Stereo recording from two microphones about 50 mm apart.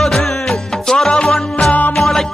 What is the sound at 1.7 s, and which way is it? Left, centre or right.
Music, left.